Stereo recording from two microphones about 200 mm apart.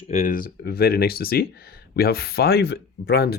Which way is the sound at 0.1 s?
40° left (ahead or behind).